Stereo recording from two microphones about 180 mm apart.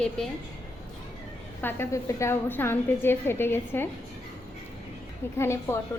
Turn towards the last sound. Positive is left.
turn(degrees=15)  # may be behind; listen again after turning